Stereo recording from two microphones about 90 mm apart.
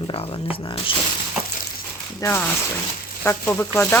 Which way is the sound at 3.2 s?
25° left (ahead or behind).